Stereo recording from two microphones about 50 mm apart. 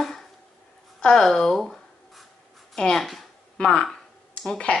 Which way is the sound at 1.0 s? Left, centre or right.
Centre.